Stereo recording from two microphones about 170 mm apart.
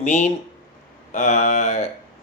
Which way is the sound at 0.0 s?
40° left (ahead or behind).